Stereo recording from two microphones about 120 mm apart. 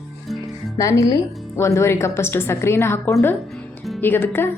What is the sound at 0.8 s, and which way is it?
A woman's voice, 25° left (ahead or behind).